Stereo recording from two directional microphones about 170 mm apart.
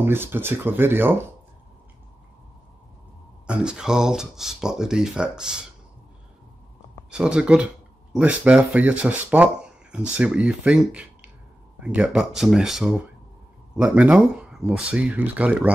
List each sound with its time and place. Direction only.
0.0 s speech: 15° right (ahead or behind)
3.4 s speech: 5° right (ahead or behind)
7.1 s speech: 5° right (ahead or behind)